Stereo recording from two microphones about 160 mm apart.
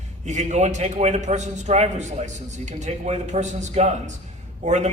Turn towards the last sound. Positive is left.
turn(degrees=-45)  # may be behind; listen again after turning